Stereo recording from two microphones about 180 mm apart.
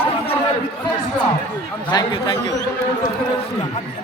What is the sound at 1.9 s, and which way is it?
Speech, 25° left (ahead or behind).